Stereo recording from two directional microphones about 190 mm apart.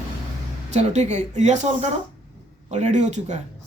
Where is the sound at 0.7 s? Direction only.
35° right (ahead or behind).